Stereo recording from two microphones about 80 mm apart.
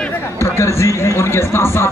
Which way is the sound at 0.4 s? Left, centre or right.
Left.